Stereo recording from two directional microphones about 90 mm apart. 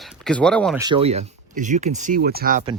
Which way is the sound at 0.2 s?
10° left (ahead or behind).